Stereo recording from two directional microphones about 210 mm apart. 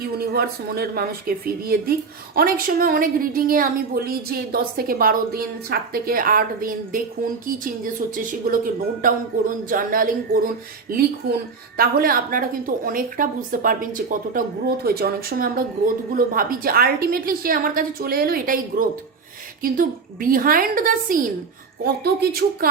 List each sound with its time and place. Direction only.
0.0 s a woman's voice: 45° right (ahead or behind)